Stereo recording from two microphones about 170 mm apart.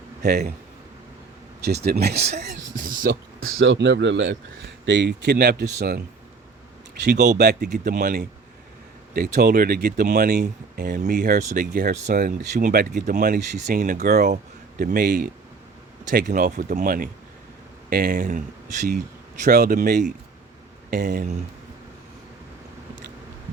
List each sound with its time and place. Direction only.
0.2 s speech: 70° right (ahead or behind)
1.6 s speech: 70° right (ahead or behind)
2.1 s speech: 40° right (ahead or behind)
2.4 s speech: 55° right (ahead or behind)
3.7 s speech: 90° right; by 6.0 s 65° right (ahead or behind)
7.3 s speech: 70° right (ahead or behind)
7.7 s speech: 55° right (ahead or behind)
19.5 s speech: 60° right (ahead or behind)